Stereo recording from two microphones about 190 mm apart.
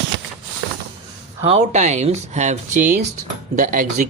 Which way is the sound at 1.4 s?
35° right (ahead or behind).